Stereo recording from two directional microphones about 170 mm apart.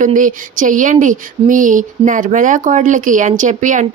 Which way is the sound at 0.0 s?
50° right (ahead or behind).